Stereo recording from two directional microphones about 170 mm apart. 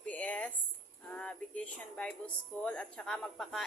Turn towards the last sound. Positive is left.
turn(degrees=0)  # may be behind; listen again after turning